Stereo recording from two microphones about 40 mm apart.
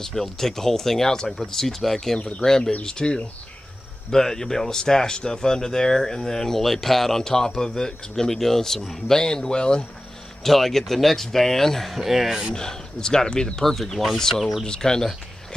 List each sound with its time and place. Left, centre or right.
0.0 s speech: centre
4.1 s speech: centre
10.4 s speech: centre
11.9 s speech: centre
12.5 s speech: centre
13.6 s speech: centre
14.6 s speech: centre